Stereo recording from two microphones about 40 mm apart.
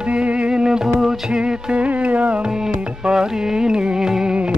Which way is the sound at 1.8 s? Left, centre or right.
Right.